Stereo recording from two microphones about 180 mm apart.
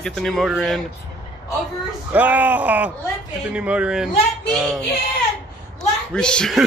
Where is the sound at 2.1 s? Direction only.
10° right (ahead or behind).